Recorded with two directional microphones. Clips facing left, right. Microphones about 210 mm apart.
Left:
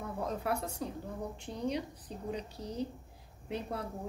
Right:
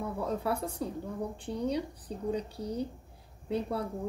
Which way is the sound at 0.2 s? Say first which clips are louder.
Right 2 dB; 30° right (ahead or behind).